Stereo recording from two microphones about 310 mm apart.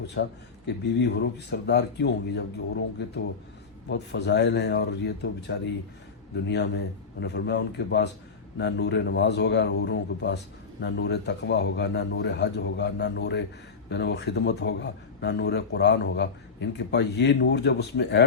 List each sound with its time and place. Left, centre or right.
0.1 s a man's voice: left